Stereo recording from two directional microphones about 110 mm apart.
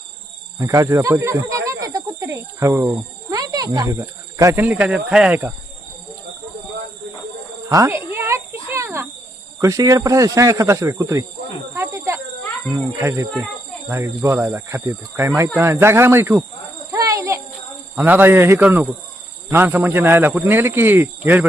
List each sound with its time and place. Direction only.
0.6 s speech: 30° right (ahead or behind)
4.6 s speech: 15° right (ahead or behind)
7.7 s cricket: 25° right (ahead or behind)
9.6 s speech: 30° right (ahead or behind)
11.7 s snake: 25° right (ahead or behind)
13.0 s speech: 25° right (ahead or behind)
13.3 s a sound: 5° right (ahead or behind)
14.3 s speech: 25° right (ahead or behind)
16.9 s insect: 30° right (ahead or behind)
17.9 s speech: 15° right (ahead or behind)